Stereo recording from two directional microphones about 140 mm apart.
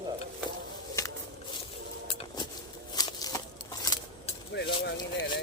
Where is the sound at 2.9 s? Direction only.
30° left (ahead or behind).